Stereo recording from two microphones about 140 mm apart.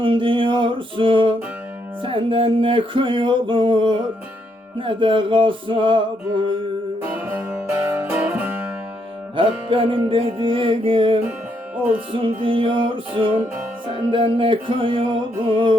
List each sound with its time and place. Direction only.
0.0 s music: 40° right (ahead or behind)
7.0 s music: 15° right (ahead or behind)
9.3 s music: 40° right (ahead or behind)